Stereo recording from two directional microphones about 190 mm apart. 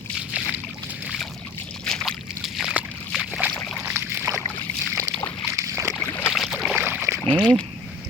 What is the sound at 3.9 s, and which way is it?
Boat, 10° right (ahead or behind).